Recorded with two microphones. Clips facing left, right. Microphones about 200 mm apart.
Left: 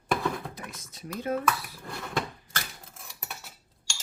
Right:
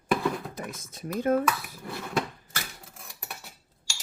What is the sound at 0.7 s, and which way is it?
Speech, 50° right (ahead or behind).